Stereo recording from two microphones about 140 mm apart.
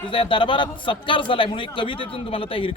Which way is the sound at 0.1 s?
35° left (ahead or behind).